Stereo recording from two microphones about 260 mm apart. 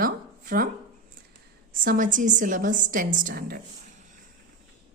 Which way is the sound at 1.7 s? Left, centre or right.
Right.